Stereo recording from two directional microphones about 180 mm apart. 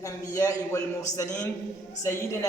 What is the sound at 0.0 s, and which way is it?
A man's voice, 15° left (ahead or behind).